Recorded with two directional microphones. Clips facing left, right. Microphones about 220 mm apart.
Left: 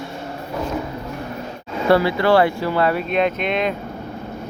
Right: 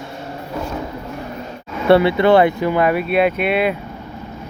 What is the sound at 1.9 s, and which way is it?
Speech, 25° right (ahead or behind).